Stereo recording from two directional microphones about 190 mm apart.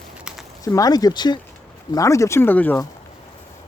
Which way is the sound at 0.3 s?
5° right (ahead or behind).